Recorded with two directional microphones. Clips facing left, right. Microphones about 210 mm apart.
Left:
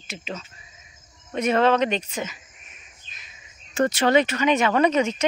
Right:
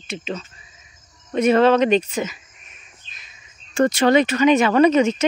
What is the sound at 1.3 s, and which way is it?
Speech, 35° right (ahead or behind).